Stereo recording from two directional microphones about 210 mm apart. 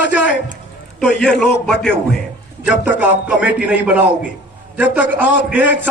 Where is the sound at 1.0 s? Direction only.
5° left (ahead or behind).